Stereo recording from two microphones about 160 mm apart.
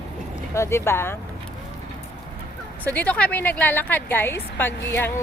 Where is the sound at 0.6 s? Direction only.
15° left (ahead or behind).